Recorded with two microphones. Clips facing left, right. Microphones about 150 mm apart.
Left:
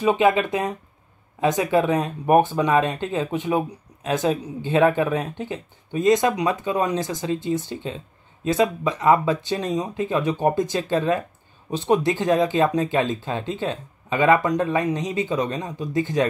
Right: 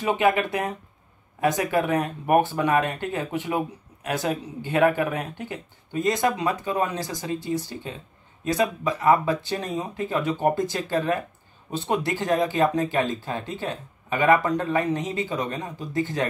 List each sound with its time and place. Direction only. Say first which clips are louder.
0.0 s speech: left 3 dB; 15° left (ahead or behind)